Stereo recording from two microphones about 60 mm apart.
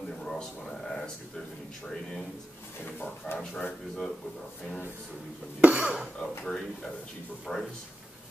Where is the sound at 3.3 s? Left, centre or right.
Centre.